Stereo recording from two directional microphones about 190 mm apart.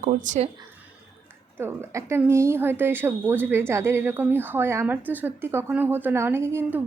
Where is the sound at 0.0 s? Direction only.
35° right (ahead or behind).